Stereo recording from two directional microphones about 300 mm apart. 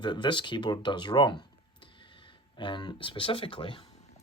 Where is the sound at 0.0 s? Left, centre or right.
Centre.